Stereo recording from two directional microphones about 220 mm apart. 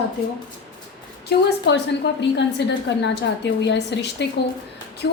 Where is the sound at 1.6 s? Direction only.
50° left (ahead or behind).